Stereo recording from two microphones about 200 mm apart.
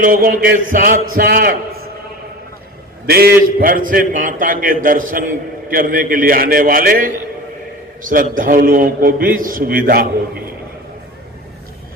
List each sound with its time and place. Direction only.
0.0 s a man's voice: 45° right (ahead or behind)
3.1 s a man's voice: 50° right (ahead or behind)